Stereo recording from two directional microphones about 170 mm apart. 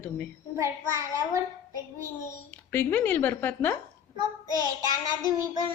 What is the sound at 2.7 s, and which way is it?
Speech, 10° left (ahead or behind).